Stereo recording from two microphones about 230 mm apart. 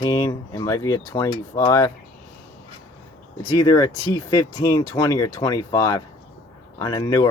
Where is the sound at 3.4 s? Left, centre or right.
Centre.